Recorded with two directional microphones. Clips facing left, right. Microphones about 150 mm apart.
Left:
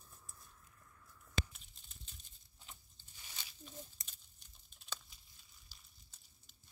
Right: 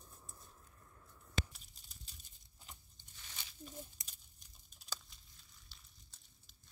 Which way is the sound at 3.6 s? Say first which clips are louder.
Right 2 dB; 10° right (ahead or behind).